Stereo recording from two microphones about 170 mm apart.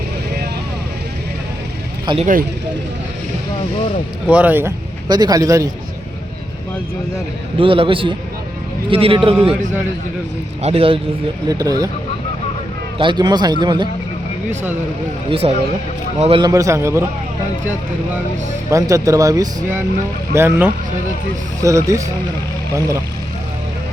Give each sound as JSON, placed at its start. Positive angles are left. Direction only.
{"t": 2.1, "sound": "speech", "side_deg": -30}
{"t": 4.3, "sound": "a man's voice", "side_deg": -10}
{"t": 5.0, "sound": "speech", "side_deg": -25}
{"t": 7.6, "sound": "speech", "side_deg": -30}
{"t": 10.6, "sound": "speech", "side_deg": -35}
{"t": 11.4, "sound": "speech", "side_deg": -20}
{"t": 13.0, "sound": "speech", "side_deg": -25}
{"t": 15.3, "sound": "speech", "side_deg": -35}
{"t": 16.5, "sound": "a man's voice", "side_deg": -20}
{"t": 18.7, "sound": "a man's voice", "side_deg": -20}